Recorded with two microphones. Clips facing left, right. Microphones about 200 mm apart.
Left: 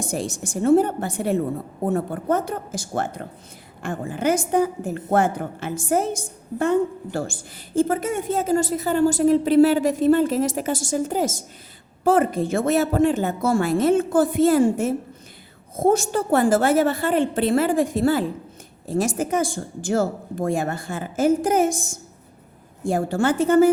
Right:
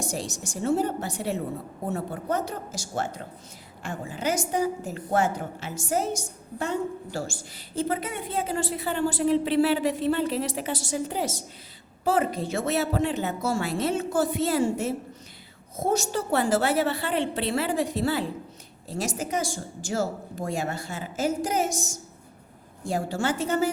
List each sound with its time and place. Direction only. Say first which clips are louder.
0.0 s a woman's voice: left 5 dB; 55° left (ahead or behind)